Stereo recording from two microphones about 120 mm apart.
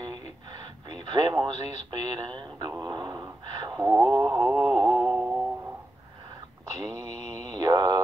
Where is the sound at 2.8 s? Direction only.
35° right (ahead or behind).